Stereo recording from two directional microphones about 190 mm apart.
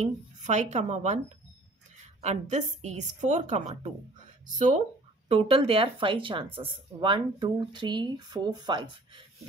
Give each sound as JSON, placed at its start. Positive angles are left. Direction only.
{"t": 0.0, "sound": "a woman's voice", "side_deg": -40}
{"t": 2.2, "sound": "a woman's voice", "side_deg": -35}
{"t": 5.3, "sound": "speech", "side_deg": -30}